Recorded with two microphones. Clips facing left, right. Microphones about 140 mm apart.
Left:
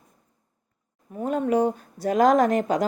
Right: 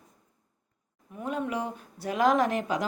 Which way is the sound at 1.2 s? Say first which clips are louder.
Left 9 dB; 40° left (ahead or behind).